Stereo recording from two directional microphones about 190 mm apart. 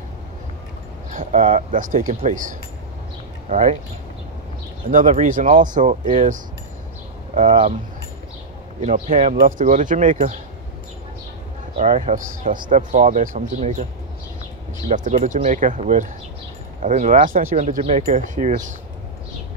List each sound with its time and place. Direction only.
1.1 s speech: 40° right (ahead or behind)
4.9 s speech: 40° right (ahead or behind)
8.8 s speech: 35° right (ahead or behind)
11.7 s speech: 35° right (ahead or behind)
14.9 s speech: 40° right (ahead or behind)